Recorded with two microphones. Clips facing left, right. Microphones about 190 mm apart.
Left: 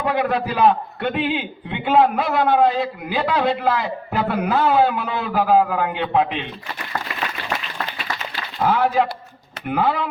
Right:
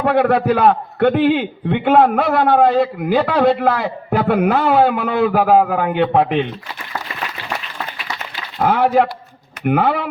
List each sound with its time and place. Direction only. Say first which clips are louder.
0.0 s a man's voice: right 6 dB; 65° right (ahead or behind)
8.6 s a man's voice: right 4 dB; 55° right (ahead or behind)